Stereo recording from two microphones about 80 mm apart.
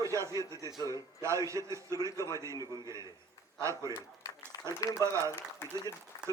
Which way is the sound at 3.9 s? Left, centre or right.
Left.